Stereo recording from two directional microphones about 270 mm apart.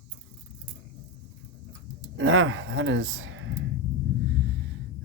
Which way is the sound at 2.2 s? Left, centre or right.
Right.